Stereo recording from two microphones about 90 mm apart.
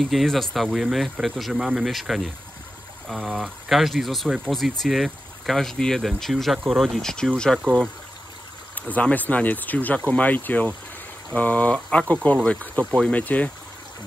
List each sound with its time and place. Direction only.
0.0 s speech: centre (ahead or behind)
8.7 s speech: 15° left (ahead or behind)